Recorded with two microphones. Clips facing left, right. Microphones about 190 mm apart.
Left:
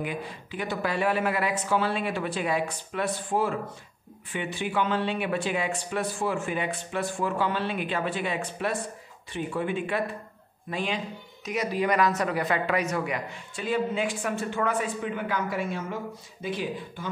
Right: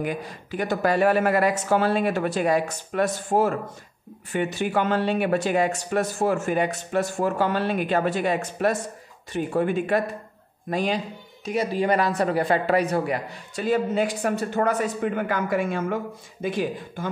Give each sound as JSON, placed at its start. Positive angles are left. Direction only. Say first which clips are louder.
{"t": 0.0, "sound": "speech", "louder": "right 4 dB", "side_deg": -40}
{"t": 11.4, "sound": "speech", "louder": "right 4 dB", "side_deg": -30}